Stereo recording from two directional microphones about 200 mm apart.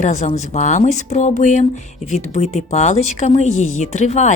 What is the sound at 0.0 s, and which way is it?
Speech, 35° left (ahead or behind).